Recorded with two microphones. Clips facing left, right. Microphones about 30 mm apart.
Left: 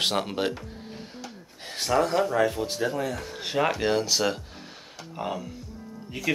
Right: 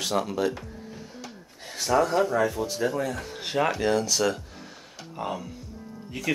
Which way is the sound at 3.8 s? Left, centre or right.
Left.